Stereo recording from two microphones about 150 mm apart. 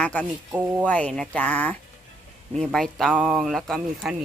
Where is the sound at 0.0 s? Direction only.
10° left (ahead or behind).